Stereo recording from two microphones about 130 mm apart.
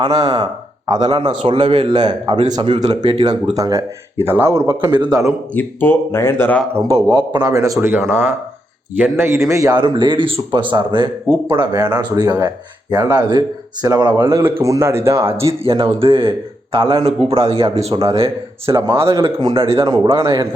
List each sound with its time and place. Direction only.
0.0 s speech: 30° right (ahead or behind)
3.5 s a man's voice: 25° right (ahead or behind)
4.9 s speech: 30° right (ahead or behind)
5.5 s speech: 15° left (ahead or behind)
6.9 s a man's voice: 35° right (ahead or behind)
14.6 s a man's voice: 20° right (ahead or behind)
15.6 s a man's voice: 45° right (ahead or behind)
18.7 s a man's voice: 30° right (ahead or behind)